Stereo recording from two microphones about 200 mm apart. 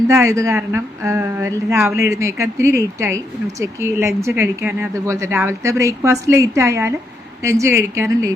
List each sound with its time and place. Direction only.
0.1 s speech: 15° right (ahead or behind)